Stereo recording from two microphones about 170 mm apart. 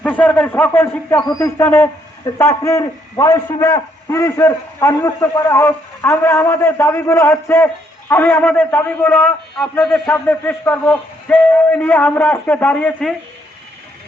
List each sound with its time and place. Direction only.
0.0 s speech: 10° left (ahead or behind)